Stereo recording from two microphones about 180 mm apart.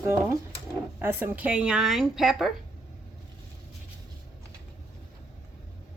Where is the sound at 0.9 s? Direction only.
15° right (ahead or behind).